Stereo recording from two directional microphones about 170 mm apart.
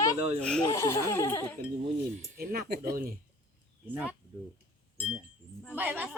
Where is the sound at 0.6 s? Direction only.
20° left (ahead or behind).